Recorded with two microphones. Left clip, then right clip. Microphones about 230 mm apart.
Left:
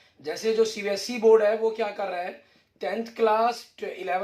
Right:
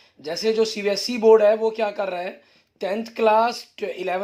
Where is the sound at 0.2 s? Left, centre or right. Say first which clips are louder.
Right 3 dB; right.